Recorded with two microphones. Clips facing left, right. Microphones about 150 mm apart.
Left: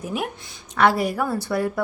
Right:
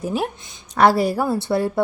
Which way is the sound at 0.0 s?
30° right (ahead or behind).